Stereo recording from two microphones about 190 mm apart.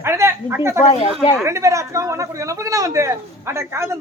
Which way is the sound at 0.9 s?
30° left (ahead or behind).